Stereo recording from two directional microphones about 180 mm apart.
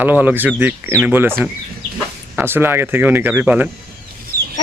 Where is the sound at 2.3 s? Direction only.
10° right (ahead or behind).